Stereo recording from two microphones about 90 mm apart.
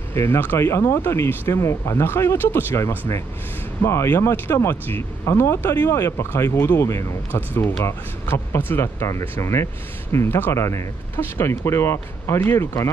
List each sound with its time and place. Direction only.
0.1 s speech: 30° left (ahead or behind)